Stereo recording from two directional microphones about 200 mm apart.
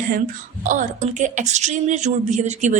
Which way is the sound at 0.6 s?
40° right (ahead or behind).